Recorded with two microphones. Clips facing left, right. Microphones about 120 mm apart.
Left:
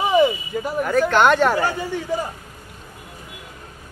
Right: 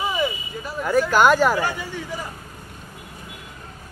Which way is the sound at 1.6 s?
40° left (ahead or behind).